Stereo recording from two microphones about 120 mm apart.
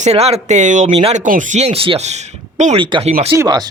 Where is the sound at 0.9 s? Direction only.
50° right (ahead or behind).